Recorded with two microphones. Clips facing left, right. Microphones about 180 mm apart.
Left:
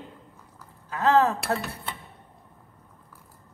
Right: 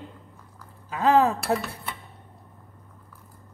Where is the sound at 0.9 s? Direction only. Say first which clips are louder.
Right 1 dB; 15° right (ahead or behind).